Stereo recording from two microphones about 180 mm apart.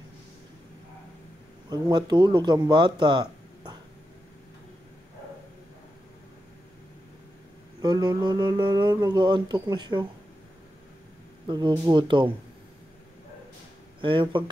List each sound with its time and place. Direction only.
1.7 s speech: 25° right (ahead or behind)
7.8 s speech: 25° right (ahead or behind)
11.4 s speech: 25° right (ahead or behind)
14.3 s speech: 25° right (ahead or behind)